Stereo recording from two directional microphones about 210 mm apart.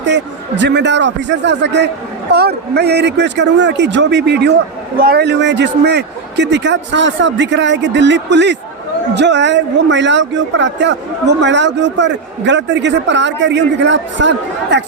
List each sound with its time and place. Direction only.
0.0 s speech: 55° right (ahead or behind)